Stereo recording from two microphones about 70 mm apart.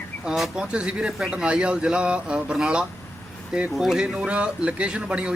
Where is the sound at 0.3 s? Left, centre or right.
Centre.